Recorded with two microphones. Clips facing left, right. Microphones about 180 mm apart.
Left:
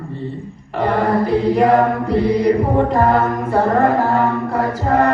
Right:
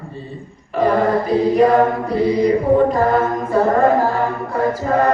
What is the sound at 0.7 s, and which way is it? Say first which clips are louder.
Mantra: right 1 dB; 65° left (ahead or behind).